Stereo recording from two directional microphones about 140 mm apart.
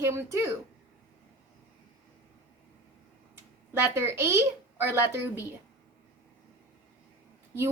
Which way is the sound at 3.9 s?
20° right (ahead or behind).